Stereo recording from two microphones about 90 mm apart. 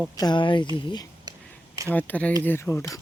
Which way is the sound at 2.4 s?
30° left (ahead or behind).